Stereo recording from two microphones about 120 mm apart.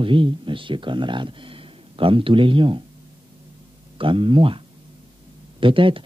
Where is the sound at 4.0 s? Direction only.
45° right (ahead or behind).